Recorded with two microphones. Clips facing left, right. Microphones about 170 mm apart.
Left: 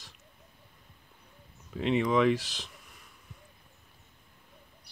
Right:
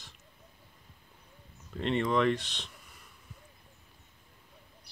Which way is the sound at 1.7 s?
5° left (ahead or behind).